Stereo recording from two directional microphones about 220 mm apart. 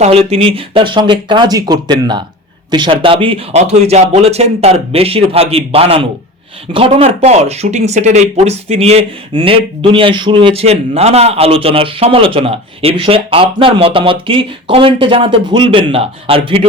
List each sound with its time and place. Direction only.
0.0 s speech: 25° right (ahead or behind)